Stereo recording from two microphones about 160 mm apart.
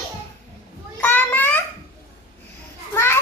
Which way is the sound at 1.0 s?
10° left (ahead or behind).